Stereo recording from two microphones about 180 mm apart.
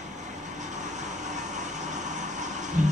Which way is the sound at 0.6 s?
40° right (ahead or behind).